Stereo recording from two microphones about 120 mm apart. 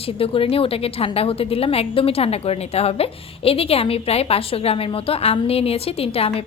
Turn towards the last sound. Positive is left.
turn(degrees=55)  # may be behind; listen again after turning